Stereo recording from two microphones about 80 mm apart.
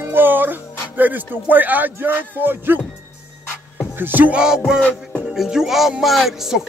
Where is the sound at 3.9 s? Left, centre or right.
Right.